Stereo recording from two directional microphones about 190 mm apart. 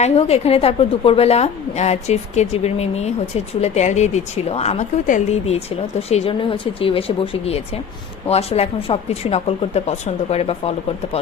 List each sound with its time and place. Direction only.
0.0 s a woman's voice: 35° left (ahead or behind)
8.3 s a woman's voice: 35° left (ahead or behind)